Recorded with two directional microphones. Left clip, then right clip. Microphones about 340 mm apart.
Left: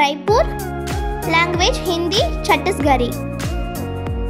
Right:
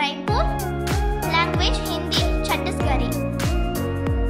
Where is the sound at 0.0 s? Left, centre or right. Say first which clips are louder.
Left 8 dB; centre.